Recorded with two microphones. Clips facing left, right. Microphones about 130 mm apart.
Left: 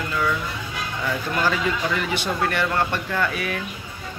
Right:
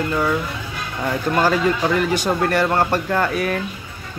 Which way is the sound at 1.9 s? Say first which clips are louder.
Right 5 dB; 40° right (ahead or behind).